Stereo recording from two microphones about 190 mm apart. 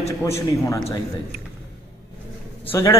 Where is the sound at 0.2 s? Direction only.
15° left (ahead or behind).